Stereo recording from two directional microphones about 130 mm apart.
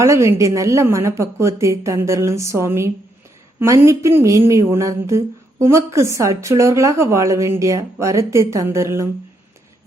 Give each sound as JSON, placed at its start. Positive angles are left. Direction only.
{"t": 0.0, "sound": "speech", "side_deg": -20}